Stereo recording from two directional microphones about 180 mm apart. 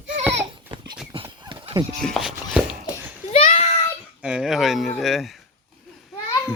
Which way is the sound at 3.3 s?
35° left (ahead or behind).